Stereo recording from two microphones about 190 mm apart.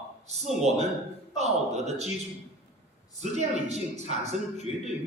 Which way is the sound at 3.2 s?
35° right (ahead or behind).